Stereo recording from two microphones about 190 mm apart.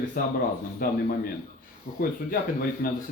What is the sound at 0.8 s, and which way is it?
Speech, 50° left (ahead or behind).